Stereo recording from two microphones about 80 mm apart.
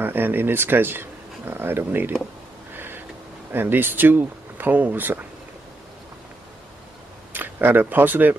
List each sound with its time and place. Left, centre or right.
0.0 s speech: right
2.7 s a sound: right
3.5 s speech: right
7.3 s speech: right